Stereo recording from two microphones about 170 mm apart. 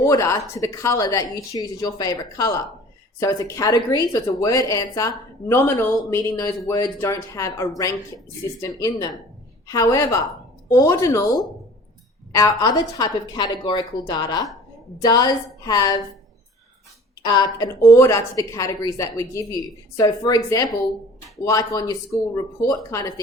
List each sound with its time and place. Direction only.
0.0 s speech: 20° left (ahead or behind)
17.2 s speech: 25° left (ahead or behind)